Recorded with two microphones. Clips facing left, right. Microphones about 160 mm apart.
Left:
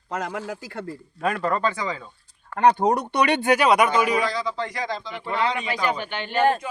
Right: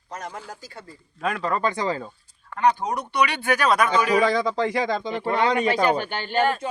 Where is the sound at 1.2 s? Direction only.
Centre (ahead or behind).